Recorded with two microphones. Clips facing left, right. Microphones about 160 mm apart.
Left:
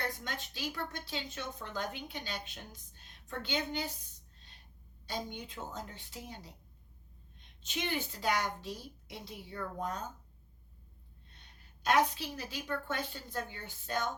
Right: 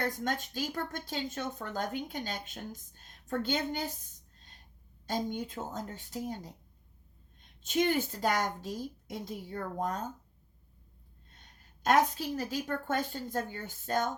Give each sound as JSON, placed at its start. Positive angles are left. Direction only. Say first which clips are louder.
{"t": 0.0, "sound": "a woman's voice", "louder": "right 7 dB", "side_deg": -45}
{"t": 7.6, "sound": "a woman's voice", "louder": "right 8 dB", "side_deg": -45}
{"t": 11.3, "sound": "a woman's voice", "louder": "right 2 dB", "side_deg": -45}